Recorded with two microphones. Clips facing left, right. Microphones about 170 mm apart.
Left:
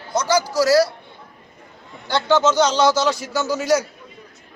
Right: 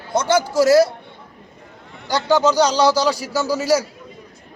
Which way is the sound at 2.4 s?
35° right (ahead or behind).